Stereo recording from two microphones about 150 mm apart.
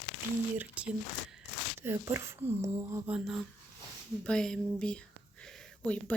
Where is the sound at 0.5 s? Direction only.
10° right (ahead or behind).